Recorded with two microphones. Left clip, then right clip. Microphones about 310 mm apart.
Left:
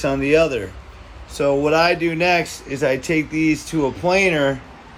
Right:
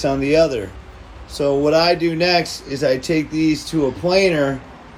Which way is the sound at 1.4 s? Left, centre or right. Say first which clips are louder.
Right 1 dB; left.